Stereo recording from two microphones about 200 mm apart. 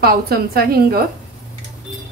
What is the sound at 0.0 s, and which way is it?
A woman's voice, 50° right (ahead or behind).